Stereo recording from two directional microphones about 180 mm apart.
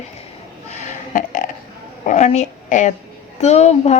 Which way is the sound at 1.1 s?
45° left (ahead or behind).